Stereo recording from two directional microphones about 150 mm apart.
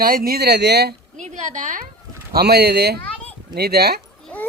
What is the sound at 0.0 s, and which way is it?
Speech, 80° right.